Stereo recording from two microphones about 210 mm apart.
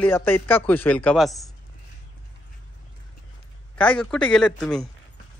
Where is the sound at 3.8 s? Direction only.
5° left (ahead or behind).